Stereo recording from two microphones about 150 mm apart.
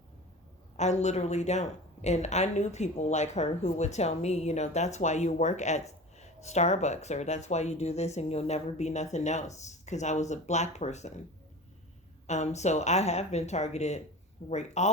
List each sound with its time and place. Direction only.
0.8 s speech: 50° left (ahead or behind)
12.3 s speech: 50° left (ahead or behind)